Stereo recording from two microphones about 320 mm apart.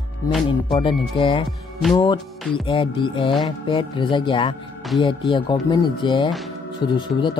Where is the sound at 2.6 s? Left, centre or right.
Centre.